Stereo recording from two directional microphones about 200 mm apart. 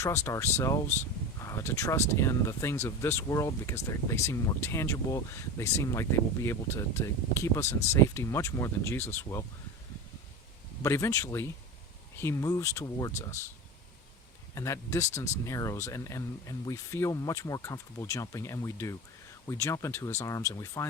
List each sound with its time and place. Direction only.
0.0 s speech: 15° left (ahead or behind)
10.8 s speech: 15° left (ahead or behind)
14.5 s speech: 15° left (ahead or behind)